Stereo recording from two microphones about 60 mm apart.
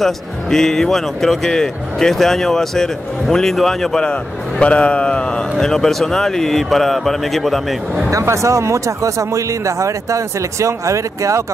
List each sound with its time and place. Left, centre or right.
0.0 s speech: centre
4.0 s speech: centre
8.1 s speech: right